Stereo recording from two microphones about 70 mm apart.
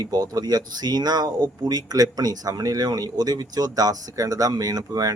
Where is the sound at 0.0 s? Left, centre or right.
Right.